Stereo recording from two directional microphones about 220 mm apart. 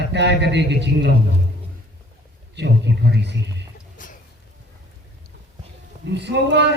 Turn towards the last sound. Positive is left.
turn(degrees=-50)  # may be behind; listen again after turning